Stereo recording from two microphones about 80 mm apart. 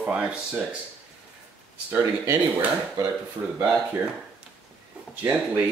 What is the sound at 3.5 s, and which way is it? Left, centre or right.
Speech, right.